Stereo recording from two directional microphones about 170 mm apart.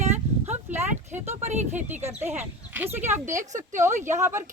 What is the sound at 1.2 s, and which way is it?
Speech, 40° right (ahead or behind).